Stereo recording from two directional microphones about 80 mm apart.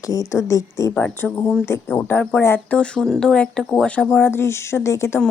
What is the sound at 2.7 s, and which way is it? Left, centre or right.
Speech, centre.